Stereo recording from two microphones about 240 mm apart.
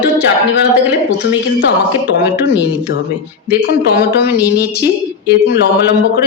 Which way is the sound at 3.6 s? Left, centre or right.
Left.